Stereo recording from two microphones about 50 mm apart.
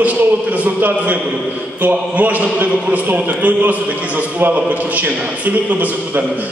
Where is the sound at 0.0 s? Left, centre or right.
Right.